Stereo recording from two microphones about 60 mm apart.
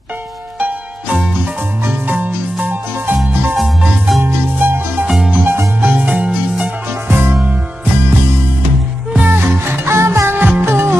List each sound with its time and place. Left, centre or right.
0.6 s music: right
1.9 s music: right
3.5 s music: centre
4.2 s music: right
7.1 s music: right
9.1 s music: right
9.7 s music: right
10.3 s music: right
10.6 s music: right